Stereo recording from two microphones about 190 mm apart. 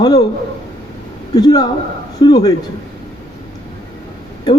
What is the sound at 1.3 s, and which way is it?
A man's voice, 20° left (ahead or behind).